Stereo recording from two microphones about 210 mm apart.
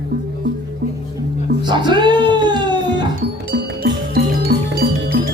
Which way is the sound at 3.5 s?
50° right (ahead or behind).